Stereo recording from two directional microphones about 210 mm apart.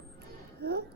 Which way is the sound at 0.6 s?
50° right (ahead or behind).